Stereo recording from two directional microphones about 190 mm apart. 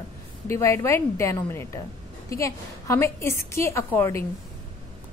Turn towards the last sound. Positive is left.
turn(degrees=10)  # may be behind; listen again after turning